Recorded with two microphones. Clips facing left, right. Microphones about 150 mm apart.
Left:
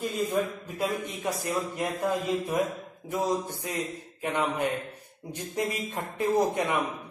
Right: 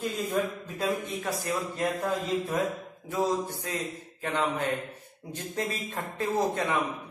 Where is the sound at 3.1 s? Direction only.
15° left (ahead or behind).